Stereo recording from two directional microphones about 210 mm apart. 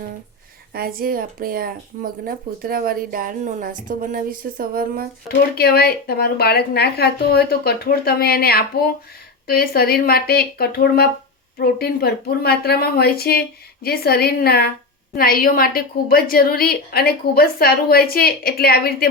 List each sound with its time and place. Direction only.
0.7 s speech: 45° right (ahead or behind)
5.5 s a woman's voice: 50° left (ahead or behind)